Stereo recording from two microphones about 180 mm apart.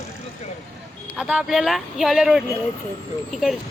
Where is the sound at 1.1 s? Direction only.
5° right (ahead or behind).